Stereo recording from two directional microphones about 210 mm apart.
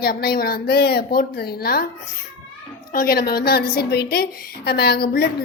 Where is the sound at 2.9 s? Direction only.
45° left (ahead or behind).